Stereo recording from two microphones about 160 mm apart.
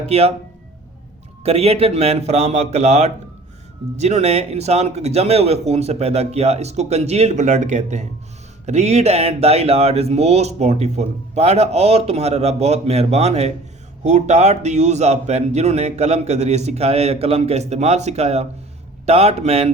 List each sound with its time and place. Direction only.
0.1 s speech: 40° right (ahead or behind)
1.5 s a man's voice: 40° right (ahead or behind)